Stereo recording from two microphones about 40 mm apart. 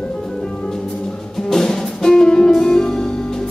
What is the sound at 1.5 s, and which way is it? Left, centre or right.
Music, centre.